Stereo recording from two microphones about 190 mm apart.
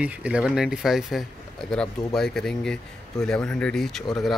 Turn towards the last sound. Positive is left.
turn(degrees=0)  # may be behind; listen again after turning